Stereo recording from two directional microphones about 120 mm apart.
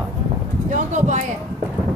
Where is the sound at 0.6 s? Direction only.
90° right.